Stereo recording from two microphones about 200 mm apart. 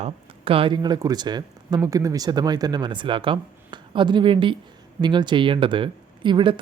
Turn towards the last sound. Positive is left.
turn(degrees=-25)  # may be behind; listen again after turning